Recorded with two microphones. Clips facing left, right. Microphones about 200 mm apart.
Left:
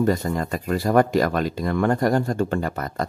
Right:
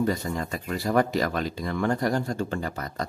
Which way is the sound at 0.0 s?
50° left (ahead or behind).